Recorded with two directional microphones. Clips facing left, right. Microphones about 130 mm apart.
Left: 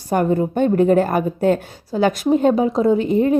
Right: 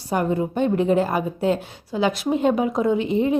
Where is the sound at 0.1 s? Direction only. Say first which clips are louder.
Left 4 dB; 45° left (ahead or behind).